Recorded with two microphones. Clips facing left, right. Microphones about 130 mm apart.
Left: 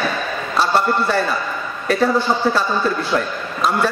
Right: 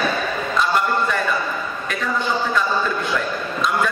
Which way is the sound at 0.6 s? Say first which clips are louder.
Left 3 dB; 35° left (ahead or behind).